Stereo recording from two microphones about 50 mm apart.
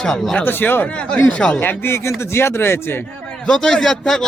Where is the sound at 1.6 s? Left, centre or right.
Left.